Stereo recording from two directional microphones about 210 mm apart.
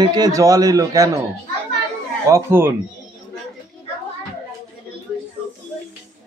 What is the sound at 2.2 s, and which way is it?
Speech, 10° right (ahead or behind).